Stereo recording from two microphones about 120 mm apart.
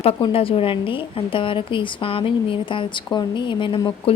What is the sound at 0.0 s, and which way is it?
A woman's voice, 55° left (ahead or behind).